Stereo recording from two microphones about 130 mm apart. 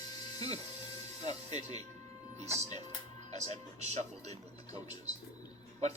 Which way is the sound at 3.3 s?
55° right (ahead or behind).